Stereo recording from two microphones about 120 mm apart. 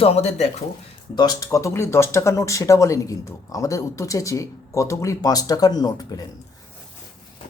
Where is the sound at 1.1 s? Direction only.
35° left (ahead or behind).